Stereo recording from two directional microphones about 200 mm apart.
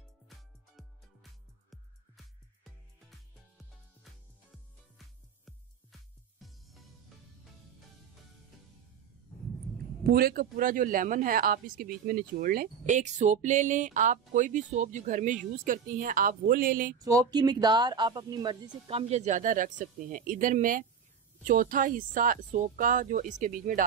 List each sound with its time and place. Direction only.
0.3 s music: centre (ahead or behind)
3.1 s music: centre (ahead or behind)
10.0 s speech: 50° right (ahead or behind)
17.0 s speech: 15° right (ahead or behind); by 23.9 s 40° right (ahead or behind)